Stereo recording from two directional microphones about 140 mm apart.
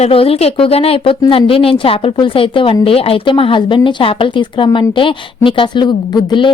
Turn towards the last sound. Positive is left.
turn(degrees=30)  # may be behind; listen again after turning